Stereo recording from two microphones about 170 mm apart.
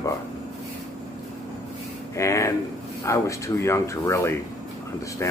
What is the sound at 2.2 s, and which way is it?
Speech, 15° left (ahead or behind).